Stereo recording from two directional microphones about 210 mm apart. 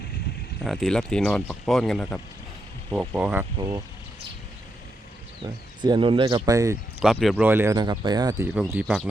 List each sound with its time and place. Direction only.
0.6 s speech: centre (ahead or behind)
3.1 s speech: 10° right (ahead or behind)
5.4 s speech: 25° right (ahead or behind)
7.0 s speech: centre (ahead or behind); by 8.4 s 20° right (ahead or behind)
8.5 s speech: 5° right (ahead or behind)